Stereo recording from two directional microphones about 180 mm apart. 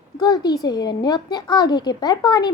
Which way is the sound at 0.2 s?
20° left (ahead or behind).